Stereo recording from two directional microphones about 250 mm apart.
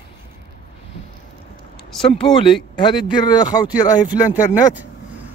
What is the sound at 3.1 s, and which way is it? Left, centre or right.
Speech, centre.